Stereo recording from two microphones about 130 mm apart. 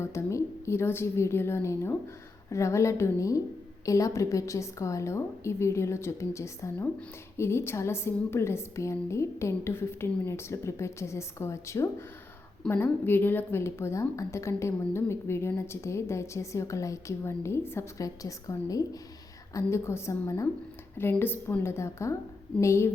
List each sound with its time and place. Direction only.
0.0 s a woman's voice: 20° left (ahead or behind)